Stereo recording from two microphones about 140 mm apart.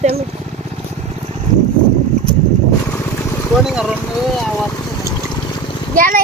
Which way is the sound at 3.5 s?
5° right (ahead or behind).